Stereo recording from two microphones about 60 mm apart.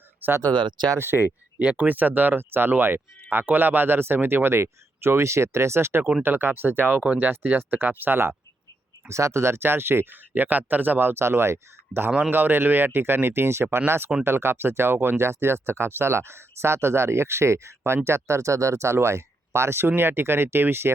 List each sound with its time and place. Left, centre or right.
0.2 s speech: right
1.5 s speech: right
9.0 s speech: right